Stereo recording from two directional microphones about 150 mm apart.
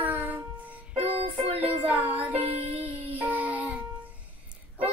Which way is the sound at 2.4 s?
40° right (ahead or behind).